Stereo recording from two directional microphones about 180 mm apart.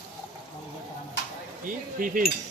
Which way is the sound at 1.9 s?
50° right (ahead or behind).